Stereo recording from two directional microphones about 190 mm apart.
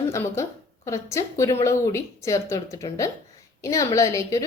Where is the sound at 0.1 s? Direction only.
15° left (ahead or behind).